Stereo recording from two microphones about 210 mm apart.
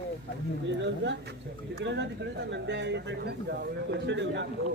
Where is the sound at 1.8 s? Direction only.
55° right (ahead or behind).